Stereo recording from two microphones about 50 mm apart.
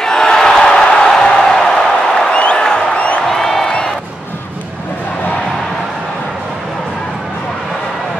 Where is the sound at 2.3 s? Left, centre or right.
Centre.